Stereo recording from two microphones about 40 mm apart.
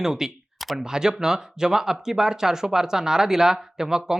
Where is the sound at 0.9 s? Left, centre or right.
Centre.